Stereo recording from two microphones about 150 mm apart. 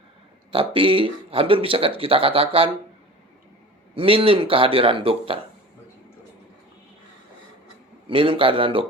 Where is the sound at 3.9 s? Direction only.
35° right (ahead or behind).